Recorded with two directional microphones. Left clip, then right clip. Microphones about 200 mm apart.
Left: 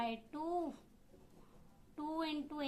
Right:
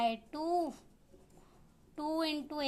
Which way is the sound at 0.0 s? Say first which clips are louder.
Right 7 dB; 45° right (ahead or behind).